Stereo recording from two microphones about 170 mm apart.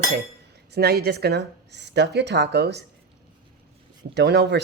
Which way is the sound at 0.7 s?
70° right (ahead or behind).